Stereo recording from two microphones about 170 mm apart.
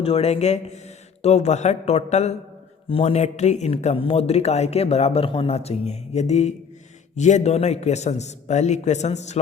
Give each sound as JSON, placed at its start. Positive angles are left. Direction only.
{"t": 0.0, "sound": "speech", "side_deg": 35}